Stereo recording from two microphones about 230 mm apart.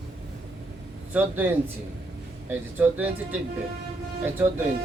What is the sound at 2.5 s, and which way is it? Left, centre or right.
Speech, centre.